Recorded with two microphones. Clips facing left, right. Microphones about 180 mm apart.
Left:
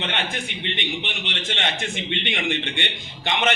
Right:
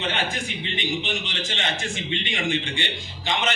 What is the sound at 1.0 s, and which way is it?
A man's voice, 60° left (ahead or behind).